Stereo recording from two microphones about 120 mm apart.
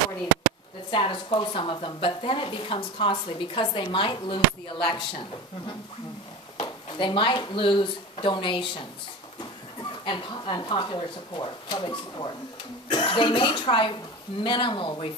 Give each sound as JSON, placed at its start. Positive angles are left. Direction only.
{"t": 0.9, "sound": "speech", "side_deg": 45}
{"t": 6.6, "sound": "speech", "side_deg": 40}
{"t": 10.0, "sound": "speech", "side_deg": 40}